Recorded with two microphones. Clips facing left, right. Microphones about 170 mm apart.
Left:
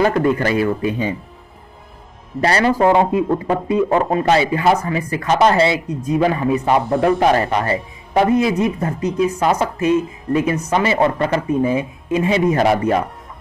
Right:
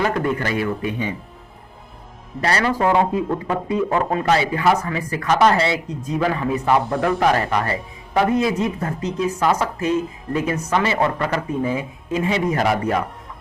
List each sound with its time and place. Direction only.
0.0 s a man's voice: 35° left (ahead or behind)
2.4 s speech: 30° left (ahead or behind)